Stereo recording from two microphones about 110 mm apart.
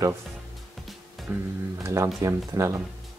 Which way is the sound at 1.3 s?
15° right (ahead or behind).